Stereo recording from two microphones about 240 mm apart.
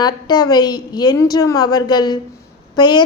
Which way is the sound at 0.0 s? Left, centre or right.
Centre.